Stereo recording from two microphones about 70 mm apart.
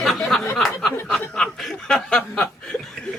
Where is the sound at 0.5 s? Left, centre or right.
Centre.